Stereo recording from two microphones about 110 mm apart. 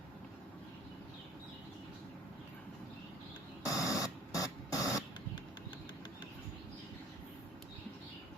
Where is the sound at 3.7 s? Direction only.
30° left (ahead or behind).